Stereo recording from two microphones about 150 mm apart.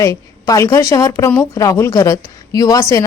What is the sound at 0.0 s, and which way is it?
A woman's voice, 20° left (ahead or behind).